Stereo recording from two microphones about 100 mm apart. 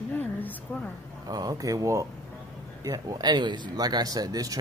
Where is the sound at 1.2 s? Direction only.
40° right (ahead or behind).